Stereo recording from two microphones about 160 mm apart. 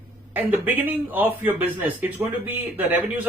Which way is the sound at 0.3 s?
10° right (ahead or behind).